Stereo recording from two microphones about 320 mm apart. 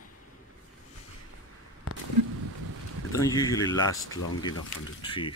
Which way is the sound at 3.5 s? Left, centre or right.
Centre.